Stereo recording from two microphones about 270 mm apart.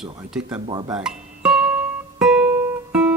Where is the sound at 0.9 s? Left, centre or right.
Centre.